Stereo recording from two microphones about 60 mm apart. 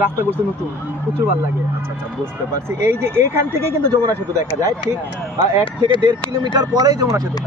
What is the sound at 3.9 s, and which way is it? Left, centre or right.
Speech, right.